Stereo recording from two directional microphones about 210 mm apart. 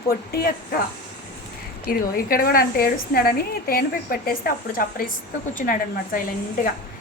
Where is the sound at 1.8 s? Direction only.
45° left (ahead or behind).